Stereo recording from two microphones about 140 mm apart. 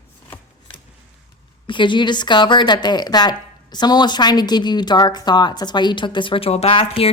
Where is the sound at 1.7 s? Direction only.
35° left (ahead or behind).